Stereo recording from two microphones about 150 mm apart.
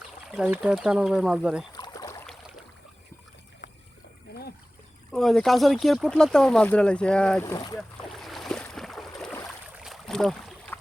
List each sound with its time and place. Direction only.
0.3 s speech: 5° right (ahead or behind)
1.7 s boat: 25° left (ahead or behind)
3.6 s trickle: 60° left (ahead or behind)
4.3 s trickle: 90° left
5.1 s speech: centre (ahead or behind)
7.4 s speech: 25° left (ahead or behind)
7.8 s boat: centre (ahead or behind)